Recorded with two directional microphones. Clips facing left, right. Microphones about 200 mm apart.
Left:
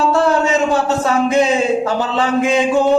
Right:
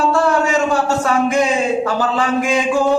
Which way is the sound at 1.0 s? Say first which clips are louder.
Left 3 dB; 25° left (ahead or behind).